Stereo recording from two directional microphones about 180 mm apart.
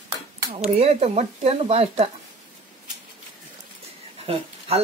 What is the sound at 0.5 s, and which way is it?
A woman's voice, 35° right (ahead or behind).